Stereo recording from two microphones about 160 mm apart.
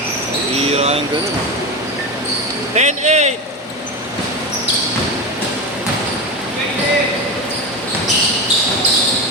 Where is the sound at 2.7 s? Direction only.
45° right (ahead or behind).